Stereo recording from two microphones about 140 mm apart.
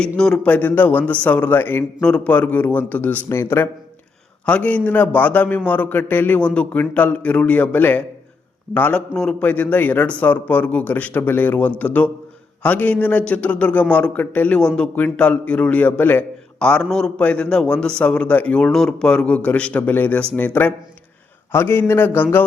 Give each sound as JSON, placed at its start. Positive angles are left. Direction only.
{"t": 0.2, "sound": "a man's voice", "side_deg": 10}